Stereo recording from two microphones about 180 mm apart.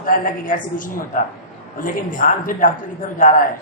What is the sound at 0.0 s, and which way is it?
A man's voice, 50° left (ahead or behind).